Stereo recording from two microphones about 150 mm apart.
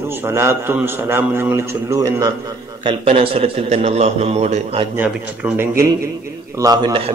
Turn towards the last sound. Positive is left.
turn(degrees=-25)  # may be behind; listen again after turning